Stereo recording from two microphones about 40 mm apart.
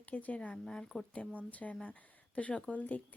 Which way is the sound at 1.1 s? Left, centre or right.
Left.